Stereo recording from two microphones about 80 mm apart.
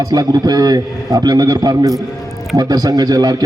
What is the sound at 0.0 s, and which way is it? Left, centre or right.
A man's voice, right.